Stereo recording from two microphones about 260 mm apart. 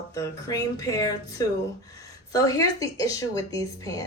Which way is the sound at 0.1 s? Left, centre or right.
Centre.